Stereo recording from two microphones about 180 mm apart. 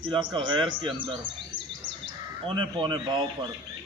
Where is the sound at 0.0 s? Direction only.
25° right (ahead or behind).